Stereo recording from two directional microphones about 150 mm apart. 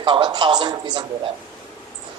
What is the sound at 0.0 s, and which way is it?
A man's voice, 35° right (ahead or behind).